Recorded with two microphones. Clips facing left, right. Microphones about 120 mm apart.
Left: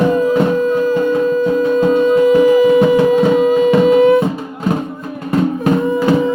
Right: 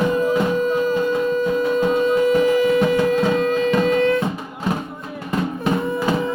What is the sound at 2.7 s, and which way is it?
Music, 15° left (ahead or behind).